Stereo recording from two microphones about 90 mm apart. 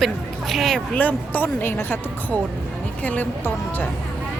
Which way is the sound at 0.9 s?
20° left (ahead or behind).